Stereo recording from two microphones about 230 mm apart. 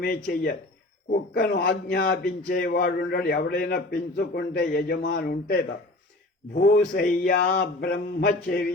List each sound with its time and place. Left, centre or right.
0.0 s a man's voice: left